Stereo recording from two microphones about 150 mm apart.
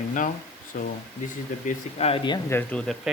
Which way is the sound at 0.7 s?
75° left (ahead or behind).